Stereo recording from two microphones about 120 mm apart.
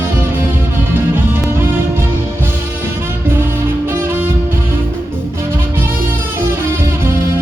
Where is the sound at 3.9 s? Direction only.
20° right (ahead or behind).